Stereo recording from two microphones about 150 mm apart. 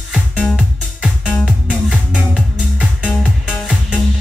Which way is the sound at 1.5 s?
5° right (ahead or behind).